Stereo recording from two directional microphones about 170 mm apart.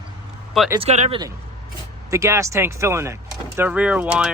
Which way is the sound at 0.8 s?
40° right (ahead or behind).